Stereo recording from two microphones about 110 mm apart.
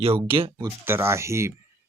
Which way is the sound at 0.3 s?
50° right (ahead or behind).